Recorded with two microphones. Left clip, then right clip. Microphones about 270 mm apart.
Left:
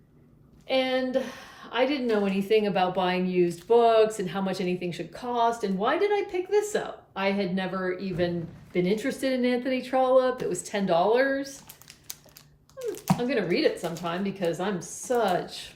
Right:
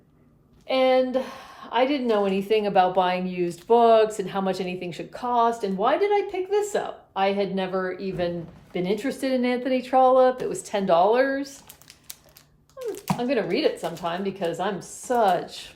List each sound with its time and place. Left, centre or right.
0.7 s a woman's voice: centre
12.8 s a sound: centre
13.2 s a woman's voice: centre